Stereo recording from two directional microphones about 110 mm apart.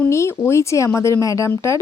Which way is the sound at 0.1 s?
25° left (ahead or behind).